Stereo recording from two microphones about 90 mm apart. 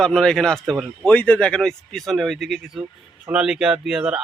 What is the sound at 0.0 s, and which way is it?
A man's voice, 5° left (ahead or behind).